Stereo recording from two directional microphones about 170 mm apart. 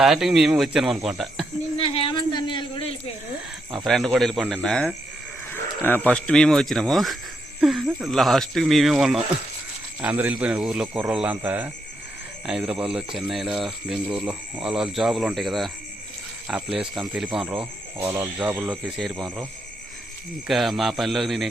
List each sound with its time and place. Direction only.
0.0 s speech: centre (ahead or behind)
1.8 s a sound: 35° left (ahead or behind)
3.8 s speech: centre (ahead or behind)
18.9 s speech: centre (ahead or behind)
20.5 s speech: centre (ahead or behind)